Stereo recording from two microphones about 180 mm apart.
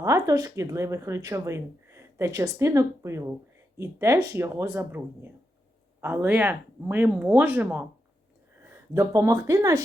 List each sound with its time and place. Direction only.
0.0 s speech: 20° right (ahead or behind)